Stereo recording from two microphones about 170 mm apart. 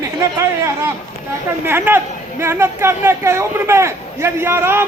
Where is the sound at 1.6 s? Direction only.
15° right (ahead or behind).